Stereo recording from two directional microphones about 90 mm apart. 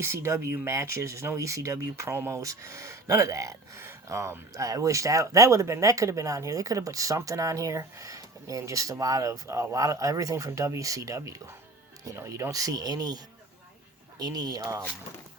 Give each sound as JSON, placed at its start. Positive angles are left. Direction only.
{"t": 0.0, "sound": "speech", "side_deg": -30}